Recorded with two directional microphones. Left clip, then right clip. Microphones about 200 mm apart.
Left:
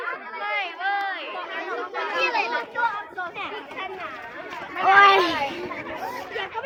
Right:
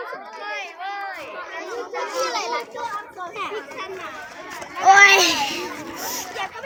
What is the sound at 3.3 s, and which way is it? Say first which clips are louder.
Speech: right 3 dB; 25° left (ahead or behind).